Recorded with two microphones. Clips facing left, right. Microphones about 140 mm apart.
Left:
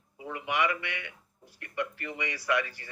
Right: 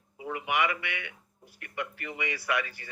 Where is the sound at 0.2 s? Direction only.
20° right (ahead or behind).